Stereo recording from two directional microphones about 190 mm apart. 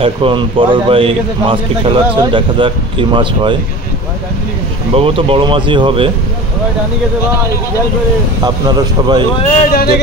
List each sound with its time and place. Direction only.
0.0 s a man's voice: 25° right (ahead or behind)
4.9 s a man's voice: 30° right (ahead or behind)
8.5 s a man's voice: 20° right (ahead or behind)
9.4 s speech: 35° left (ahead or behind)